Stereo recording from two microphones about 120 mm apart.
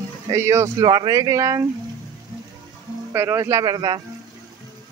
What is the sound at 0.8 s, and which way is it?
Speech, 35° right (ahead or behind).